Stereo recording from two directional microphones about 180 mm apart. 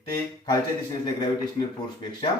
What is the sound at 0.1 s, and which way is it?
Speech, 20° left (ahead or behind).